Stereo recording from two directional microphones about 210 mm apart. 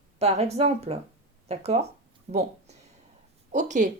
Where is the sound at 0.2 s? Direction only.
30° right (ahead or behind).